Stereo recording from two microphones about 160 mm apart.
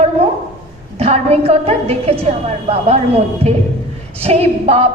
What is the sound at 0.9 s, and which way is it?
A woman's voice, 40° right (ahead or behind).